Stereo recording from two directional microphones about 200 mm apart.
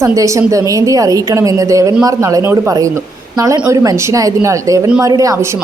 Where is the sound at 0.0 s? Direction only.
15° right (ahead or behind).